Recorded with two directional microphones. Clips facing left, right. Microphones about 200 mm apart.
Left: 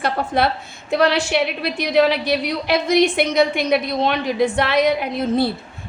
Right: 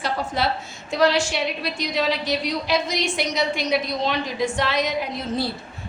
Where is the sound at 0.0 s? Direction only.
55° left (ahead or behind).